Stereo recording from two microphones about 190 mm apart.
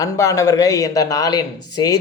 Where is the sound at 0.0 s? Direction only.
15° left (ahead or behind).